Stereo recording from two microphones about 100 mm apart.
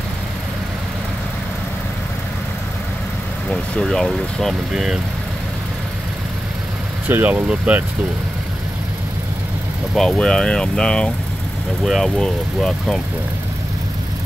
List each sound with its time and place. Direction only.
3.4 s speech: 5° left (ahead or behind)
7.1 s speech: 20° right (ahead or behind)
9.9 s speech: 5° left (ahead or behind)